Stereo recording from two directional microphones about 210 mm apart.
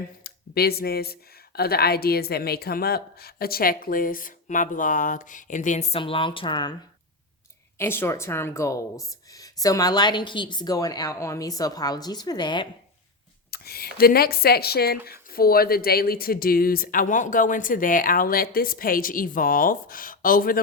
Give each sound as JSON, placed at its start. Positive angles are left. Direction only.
{"t": 0.2, "sound": "speech", "side_deg": 50}
{"t": 7.8, "sound": "a woman's voice", "side_deg": 10}
{"t": 13.5, "sound": "speech", "side_deg": 45}